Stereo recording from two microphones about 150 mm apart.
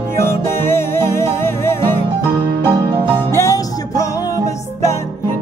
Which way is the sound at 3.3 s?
20° left (ahead or behind).